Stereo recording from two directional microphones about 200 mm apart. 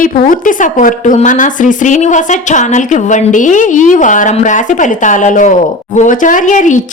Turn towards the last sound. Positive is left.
turn(degrees=40)  # may be behind; listen again after turning